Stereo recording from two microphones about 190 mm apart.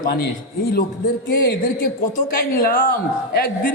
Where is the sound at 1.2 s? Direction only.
50° left (ahead or behind).